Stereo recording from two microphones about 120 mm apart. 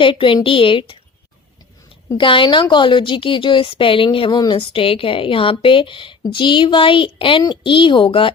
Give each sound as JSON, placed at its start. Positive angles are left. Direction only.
{"t": 0.0, "sound": "a woman's voice", "side_deg": 45}
{"t": 2.1, "sound": "a woman's voice", "side_deg": 45}